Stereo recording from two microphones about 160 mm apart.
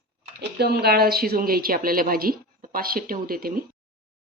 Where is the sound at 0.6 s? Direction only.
75° right (ahead or behind).